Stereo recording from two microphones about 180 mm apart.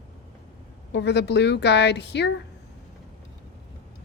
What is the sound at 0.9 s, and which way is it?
Speech, 70° left (ahead or behind).